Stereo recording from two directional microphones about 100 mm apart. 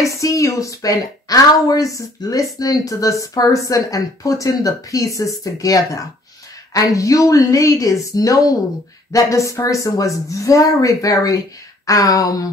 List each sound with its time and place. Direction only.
0.0 s a woman's voice: 35° left (ahead or behind)